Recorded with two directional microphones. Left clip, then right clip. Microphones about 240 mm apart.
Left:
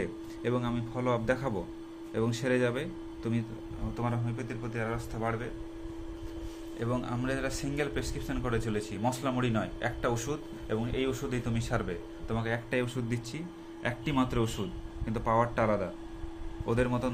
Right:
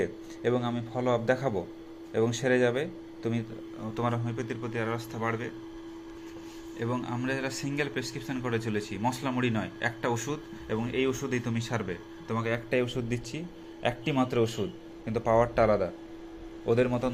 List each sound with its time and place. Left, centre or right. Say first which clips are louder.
0.0 s a man's voice: right 4 dB; centre
3.9 s a man's voice: right 4 dB; centre
6.7 s a man's voice: right 1 dB; centre